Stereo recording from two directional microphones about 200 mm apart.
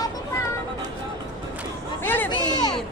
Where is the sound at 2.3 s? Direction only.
20° left (ahead or behind).